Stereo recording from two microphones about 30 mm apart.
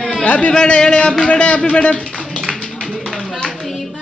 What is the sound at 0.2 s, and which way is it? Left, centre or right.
Speech, left.